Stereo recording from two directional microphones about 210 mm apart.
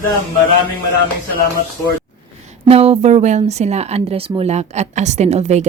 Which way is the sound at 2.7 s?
30° right (ahead or behind).